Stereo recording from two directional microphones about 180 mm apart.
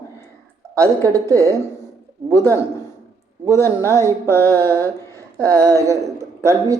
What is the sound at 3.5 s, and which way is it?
Speech, 15° left (ahead or behind).